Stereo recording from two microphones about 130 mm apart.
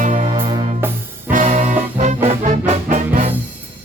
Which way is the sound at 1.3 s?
75° right (ahead or behind).